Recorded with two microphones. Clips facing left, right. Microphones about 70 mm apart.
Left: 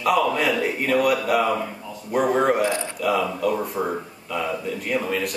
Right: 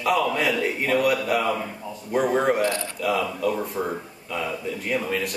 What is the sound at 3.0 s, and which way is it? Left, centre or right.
Speech, centre.